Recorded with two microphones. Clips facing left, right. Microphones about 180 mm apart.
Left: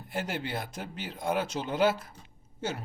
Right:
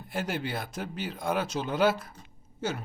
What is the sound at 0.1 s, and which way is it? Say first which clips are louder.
Speech: right 1 dB; 25° left (ahead or behind).